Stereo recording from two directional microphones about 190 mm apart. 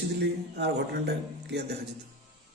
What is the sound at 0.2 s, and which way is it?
A man's voice, 60° right (ahead or behind).